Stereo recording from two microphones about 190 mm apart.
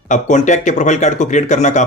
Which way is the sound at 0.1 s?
40° left (ahead or behind).